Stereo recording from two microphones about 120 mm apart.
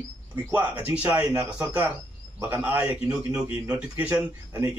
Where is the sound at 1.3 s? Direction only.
30° right (ahead or behind).